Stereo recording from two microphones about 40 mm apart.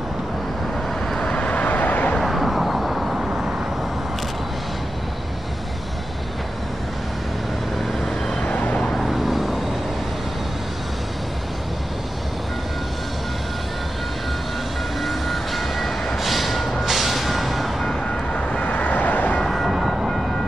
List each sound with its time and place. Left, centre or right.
1.2 s vehicle: left
2.2 s vehicle: centre
8.5 s vehicle: left
8.9 s vehicle: centre
15.0 s vehicle: centre
16.2 s train: centre
16.8 s vehicle: centre
18.3 s vehicle: left
19.4 s vehicle: centre